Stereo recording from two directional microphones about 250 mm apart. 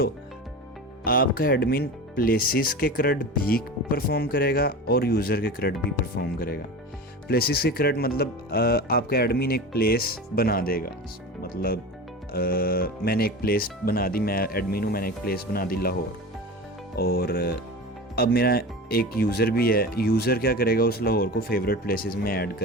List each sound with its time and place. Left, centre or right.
1.0 s speech: left
17.0 s speech: left